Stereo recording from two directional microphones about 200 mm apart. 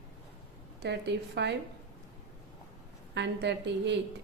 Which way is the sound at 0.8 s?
60° right (ahead or behind).